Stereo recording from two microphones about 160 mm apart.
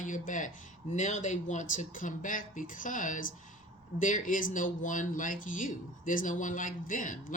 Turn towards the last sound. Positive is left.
turn(degrees=55)  # may be behind; listen again after turning